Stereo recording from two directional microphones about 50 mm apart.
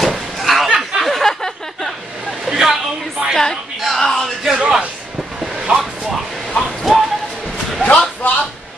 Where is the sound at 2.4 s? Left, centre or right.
Centre.